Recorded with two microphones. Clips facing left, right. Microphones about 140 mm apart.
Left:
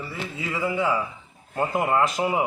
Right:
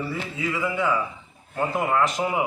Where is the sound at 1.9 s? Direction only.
20° left (ahead or behind).